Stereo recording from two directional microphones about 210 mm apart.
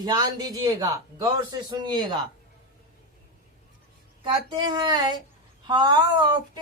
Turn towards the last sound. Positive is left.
turn(degrees=-20)  # may be behind; listen again after turning